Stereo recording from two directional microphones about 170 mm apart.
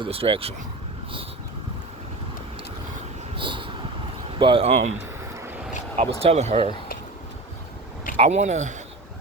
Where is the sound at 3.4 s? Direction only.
30° right (ahead or behind).